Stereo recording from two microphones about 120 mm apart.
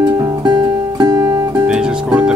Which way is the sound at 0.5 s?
35° right (ahead or behind).